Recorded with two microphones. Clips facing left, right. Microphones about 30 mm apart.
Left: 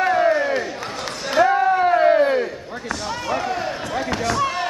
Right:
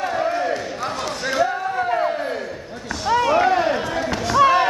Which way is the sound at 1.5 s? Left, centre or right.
Left.